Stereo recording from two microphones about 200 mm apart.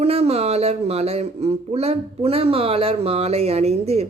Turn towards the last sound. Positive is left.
turn(degrees=-30)  # may be behind; listen again after turning